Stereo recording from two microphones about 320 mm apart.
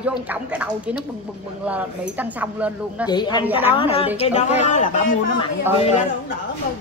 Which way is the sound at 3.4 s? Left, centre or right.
Centre.